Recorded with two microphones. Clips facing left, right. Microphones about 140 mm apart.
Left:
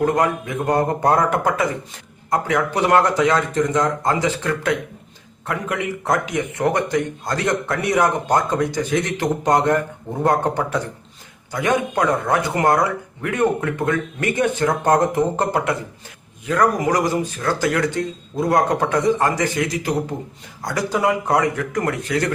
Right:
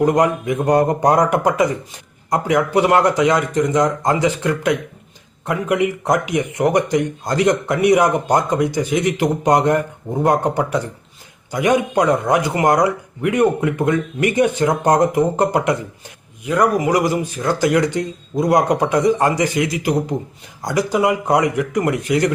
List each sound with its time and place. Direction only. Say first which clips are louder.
0.0 s speech: right 3 dB; 15° right (ahead or behind)